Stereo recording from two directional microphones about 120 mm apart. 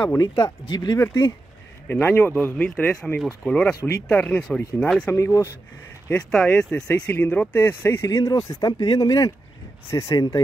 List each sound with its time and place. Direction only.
0.2 s speech: 35° left (ahead or behind)
1.9 s speech: 20° left (ahead or behind)
5.1 s speech: 25° left (ahead or behind)
6.0 s speech: 10° left (ahead or behind); by 10.4 s 30° left (ahead or behind)